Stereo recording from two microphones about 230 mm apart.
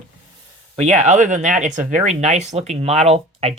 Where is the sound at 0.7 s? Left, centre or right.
Right.